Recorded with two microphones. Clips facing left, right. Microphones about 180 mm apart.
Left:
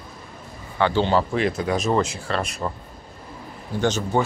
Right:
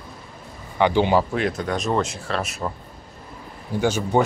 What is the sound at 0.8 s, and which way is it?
Speech, 15° right (ahead or behind).